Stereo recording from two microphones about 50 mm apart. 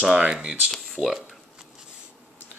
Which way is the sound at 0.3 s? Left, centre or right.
Centre.